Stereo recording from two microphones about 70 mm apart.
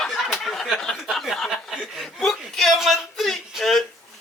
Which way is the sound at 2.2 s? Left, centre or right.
Centre.